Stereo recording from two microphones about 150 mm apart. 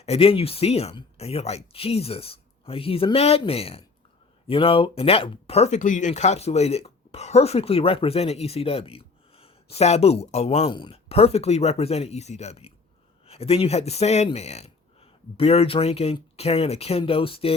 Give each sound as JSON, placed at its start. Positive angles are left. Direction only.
{"t": 0.0, "sound": "speech", "side_deg": 40}
{"t": 10.7, "sound": "speech", "side_deg": 30}